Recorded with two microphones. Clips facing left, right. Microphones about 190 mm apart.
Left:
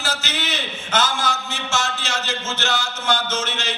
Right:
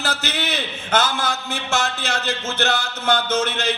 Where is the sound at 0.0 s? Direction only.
60° right (ahead or behind).